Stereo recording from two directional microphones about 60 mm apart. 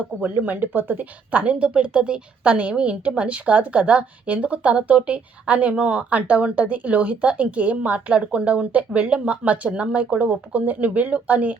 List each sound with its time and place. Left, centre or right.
0.2 s speech: right